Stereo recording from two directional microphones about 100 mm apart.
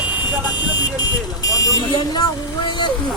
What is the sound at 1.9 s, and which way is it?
Speech, 45° left (ahead or behind).